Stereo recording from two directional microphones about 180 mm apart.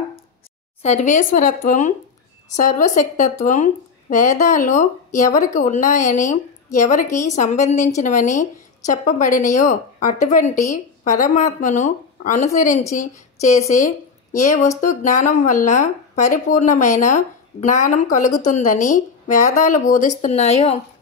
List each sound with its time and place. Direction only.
0.8 s a woman's voice: 40° left (ahead or behind)